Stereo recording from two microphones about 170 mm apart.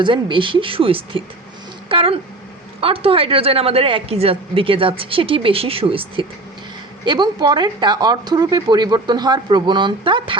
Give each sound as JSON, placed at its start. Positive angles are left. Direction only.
{"t": 0.0, "sound": "a woman's voice", "side_deg": -30}